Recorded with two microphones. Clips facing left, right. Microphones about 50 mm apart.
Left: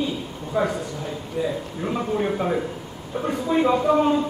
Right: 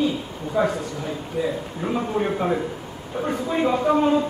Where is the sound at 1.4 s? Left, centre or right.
Centre.